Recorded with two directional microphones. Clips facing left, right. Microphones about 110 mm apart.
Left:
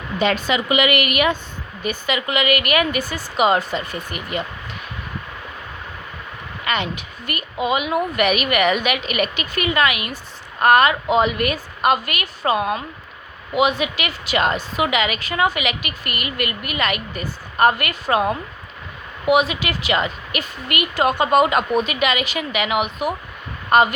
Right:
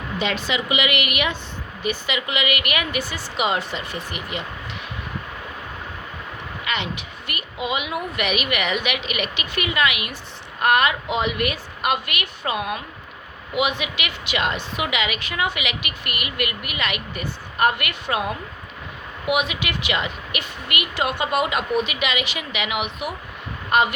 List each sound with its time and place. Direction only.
0.2 s a woman's voice: 45° left (ahead or behind)
6.7 s a woman's voice: 45° left (ahead or behind)